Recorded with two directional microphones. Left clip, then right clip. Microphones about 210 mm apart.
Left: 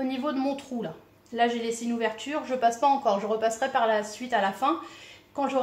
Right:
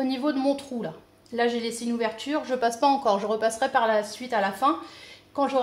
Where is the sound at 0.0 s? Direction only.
30° right (ahead or behind).